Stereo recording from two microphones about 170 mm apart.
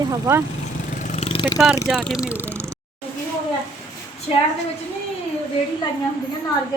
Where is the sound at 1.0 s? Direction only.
40° left (ahead or behind).